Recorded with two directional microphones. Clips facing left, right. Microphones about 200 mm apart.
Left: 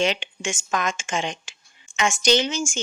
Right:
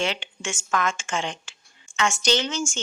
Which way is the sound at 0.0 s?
15° left (ahead or behind).